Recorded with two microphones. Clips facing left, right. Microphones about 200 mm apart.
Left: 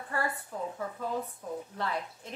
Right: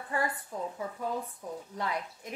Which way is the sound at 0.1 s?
15° right (ahead or behind).